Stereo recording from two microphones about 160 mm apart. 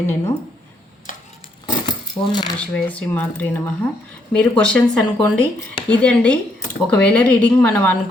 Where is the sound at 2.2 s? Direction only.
25° left (ahead or behind).